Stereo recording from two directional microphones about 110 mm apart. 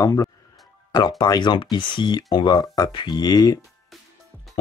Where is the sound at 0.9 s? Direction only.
45° left (ahead or behind).